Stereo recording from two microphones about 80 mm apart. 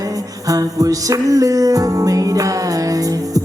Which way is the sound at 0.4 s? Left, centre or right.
Right.